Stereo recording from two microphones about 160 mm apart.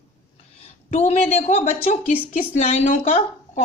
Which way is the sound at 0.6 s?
40° left (ahead or behind).